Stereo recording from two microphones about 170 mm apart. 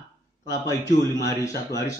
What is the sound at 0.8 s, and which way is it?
Speech, 20° left (ahead or behind).